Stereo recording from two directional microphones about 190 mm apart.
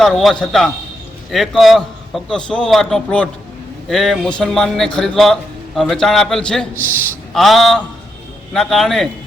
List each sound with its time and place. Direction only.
0.0 s a man's voice: centre (ahead or behind)